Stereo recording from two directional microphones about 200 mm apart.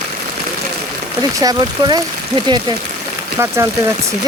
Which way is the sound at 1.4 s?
20° right (ahead or behind).